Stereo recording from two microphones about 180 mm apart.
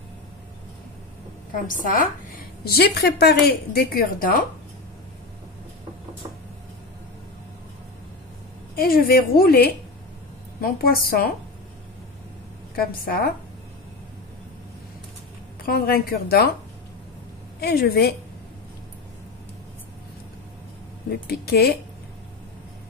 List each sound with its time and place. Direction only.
1.7 s a woman's voice: 50° left (ahead or behind)
2.6 s a woman's voice: 60° left (ahead or behind)
8.7 s a woman's voice: 55° left (ahead or behind)
12.7 s a woman's voice: 55° left (ahead or behind)
15.6 s a woman's voice: 55° left (ahead or behind)
17.6 s a woman's voice: 60° left (ahead or behind)
21.1 s a woman's voice: 60° left (ahead or behind)